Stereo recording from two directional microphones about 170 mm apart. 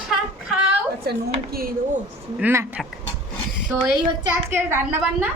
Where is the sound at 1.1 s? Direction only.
60° right (ahead or behind).